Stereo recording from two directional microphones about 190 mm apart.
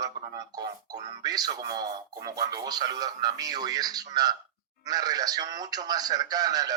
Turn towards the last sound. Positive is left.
turn(degrees=-20)  # may be behind; listen again after turning